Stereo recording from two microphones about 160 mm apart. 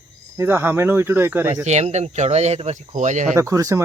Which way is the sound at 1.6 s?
45° right (ahead or behind).